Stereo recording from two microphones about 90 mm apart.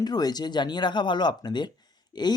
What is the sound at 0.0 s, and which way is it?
Speech, 50° left (ahead or behind).